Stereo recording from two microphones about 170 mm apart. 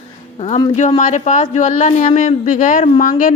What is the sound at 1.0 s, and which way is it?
Speech, 45° left (ahead or behind).